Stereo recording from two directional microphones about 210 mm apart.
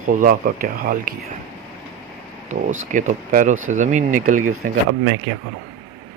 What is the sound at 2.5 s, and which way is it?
Speech, 35° right (ahead or behind).